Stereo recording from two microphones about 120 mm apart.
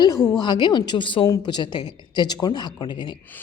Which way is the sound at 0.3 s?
40° left (ahead or behind).